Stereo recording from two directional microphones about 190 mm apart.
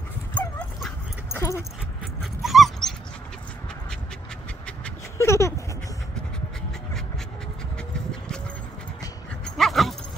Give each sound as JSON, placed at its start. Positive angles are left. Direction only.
{"t": 0.3, "sound": "dog", "side_deg": 5}
{"t": 1.3, "sound": "dog", "side_deg": 15}
{"t": 2.4, "sound": "dog", "side_deg": 0}
{"t": 4.6, "sound": "a sound", "side_deg": 10}
{"t": 9.6, "sound": "dog", "side_deg": 0}